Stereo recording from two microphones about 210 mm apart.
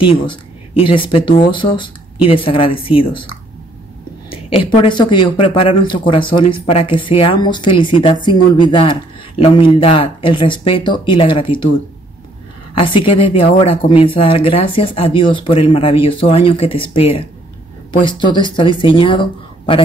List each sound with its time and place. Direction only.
0.0 s speech: 25° left (ahead or behind)
4.3 s speech: 25° left (ahead or behind)
12.7 s speech: 25° left (ahead or behind)